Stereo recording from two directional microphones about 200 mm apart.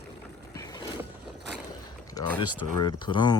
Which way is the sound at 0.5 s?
20° left (ahead or behind).